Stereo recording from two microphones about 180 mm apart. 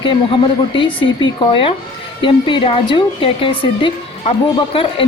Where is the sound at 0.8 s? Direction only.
25° left (ahead or behind).